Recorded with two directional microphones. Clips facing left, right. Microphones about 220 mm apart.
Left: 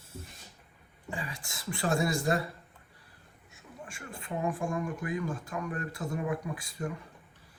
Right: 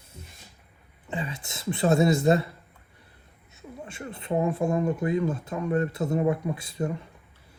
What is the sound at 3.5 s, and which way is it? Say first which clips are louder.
Speech: right 6 dB; 25° right (ahead or behind).